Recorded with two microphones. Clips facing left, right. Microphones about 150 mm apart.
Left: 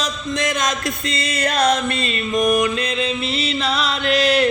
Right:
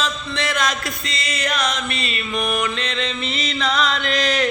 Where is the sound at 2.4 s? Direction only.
40° left (ahead or behind).